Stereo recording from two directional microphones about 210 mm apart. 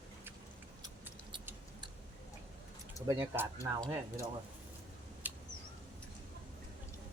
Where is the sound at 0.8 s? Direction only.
15° right (ahead or behind).